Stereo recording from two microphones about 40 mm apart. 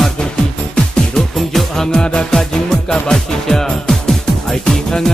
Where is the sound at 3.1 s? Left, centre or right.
Centre.